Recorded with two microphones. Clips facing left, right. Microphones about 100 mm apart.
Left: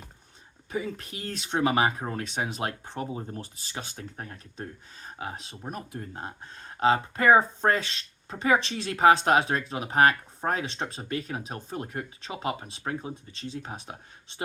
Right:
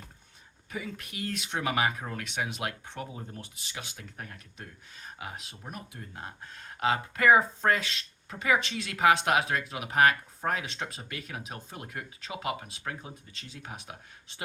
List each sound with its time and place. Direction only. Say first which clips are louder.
0.7 s speech: left 6 dB; 30° left (ahead or behind)